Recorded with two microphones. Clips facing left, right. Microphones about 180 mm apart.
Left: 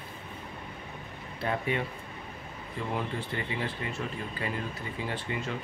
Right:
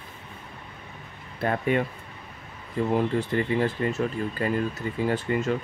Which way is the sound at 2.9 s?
45° right (ahead or behind).